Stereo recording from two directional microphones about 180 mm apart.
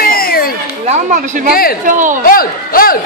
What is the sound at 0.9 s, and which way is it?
Speech, 40° right (ahead or behind).